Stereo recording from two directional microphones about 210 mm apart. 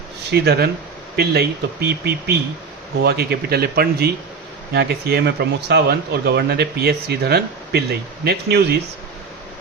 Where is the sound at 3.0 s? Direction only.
50° right (ahead or behind).